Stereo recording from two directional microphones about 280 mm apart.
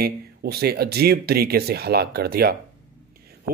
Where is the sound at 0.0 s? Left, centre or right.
Right.